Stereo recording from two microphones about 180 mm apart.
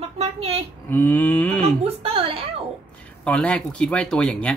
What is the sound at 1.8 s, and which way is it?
Speech, 30° right (ahead or behind).